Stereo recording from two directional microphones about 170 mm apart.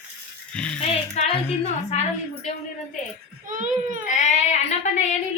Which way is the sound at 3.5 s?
50° right (ahead or behind).